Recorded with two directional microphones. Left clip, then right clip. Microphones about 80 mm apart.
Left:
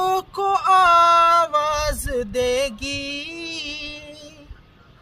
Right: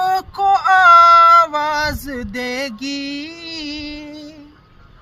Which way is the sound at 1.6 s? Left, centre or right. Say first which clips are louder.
Right 3 dB; left.